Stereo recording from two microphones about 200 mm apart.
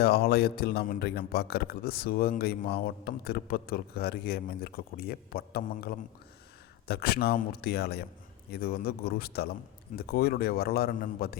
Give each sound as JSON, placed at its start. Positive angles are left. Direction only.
{"t": 0.0, "sound": "a man's voice", "side_deg": 50}